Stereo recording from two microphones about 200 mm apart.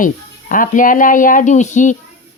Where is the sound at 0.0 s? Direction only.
45° left (ahead or behind).